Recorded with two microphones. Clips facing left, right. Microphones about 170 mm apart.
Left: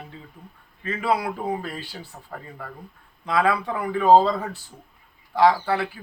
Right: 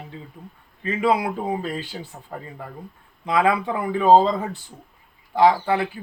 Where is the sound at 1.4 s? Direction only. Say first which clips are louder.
Right 2 dB; 15° right (ahead or behind).